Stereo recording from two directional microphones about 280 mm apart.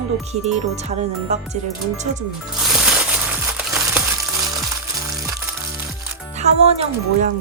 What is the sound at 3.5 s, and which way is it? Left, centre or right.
Music, centre.